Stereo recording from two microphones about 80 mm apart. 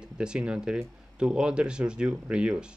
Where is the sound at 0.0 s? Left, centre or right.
Centre.